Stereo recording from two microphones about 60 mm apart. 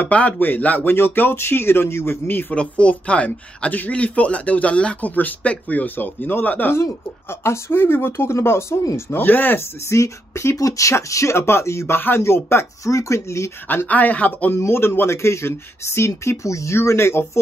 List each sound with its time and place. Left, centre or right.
0.0 s speech: left
2.5 s speech: left
6.7 s speech: left
8.9 s speech: left
9.8 s speech: left
11.3 s speech: left
13.8 s speech: left
14.5 s speech: left